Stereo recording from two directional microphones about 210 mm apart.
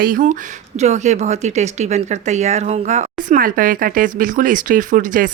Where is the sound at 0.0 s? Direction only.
40° right (ahead or behind).